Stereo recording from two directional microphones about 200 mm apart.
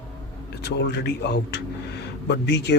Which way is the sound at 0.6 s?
60° left (ahead or behind).